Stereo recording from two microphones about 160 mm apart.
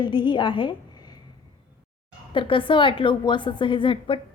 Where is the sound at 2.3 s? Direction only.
30° left (ahead or behind).